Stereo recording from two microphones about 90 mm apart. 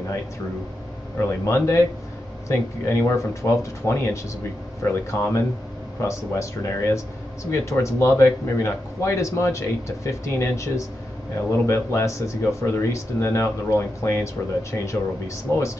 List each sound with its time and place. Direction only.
1.1 s speech: 30° left (ahead or behind)